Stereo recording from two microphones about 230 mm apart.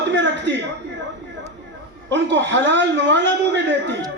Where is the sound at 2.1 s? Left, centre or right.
Right.